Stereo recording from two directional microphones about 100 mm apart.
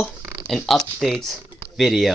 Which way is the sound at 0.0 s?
5° left (ahead or behind).